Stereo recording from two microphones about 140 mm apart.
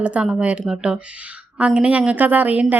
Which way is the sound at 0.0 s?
10° right (ahead or behind).